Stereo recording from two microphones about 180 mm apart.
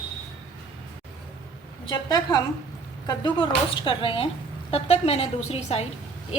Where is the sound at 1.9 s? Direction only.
20° left (ahead or behind).